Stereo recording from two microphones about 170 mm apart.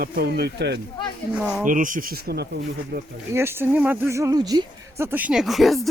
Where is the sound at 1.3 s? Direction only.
5° right (ahead or behind).